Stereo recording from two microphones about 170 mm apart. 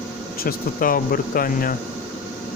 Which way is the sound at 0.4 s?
55° left (ahead or behind).